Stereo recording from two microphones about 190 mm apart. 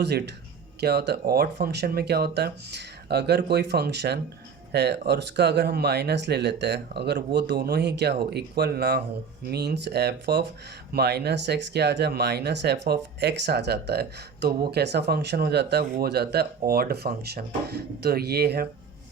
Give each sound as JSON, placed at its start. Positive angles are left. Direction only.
{"t": 0.8, "sound": "speech", "side_deg": -60}